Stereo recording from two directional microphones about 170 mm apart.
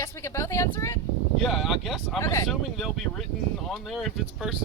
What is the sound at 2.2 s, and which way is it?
Speech, 15° left (ahead or behind).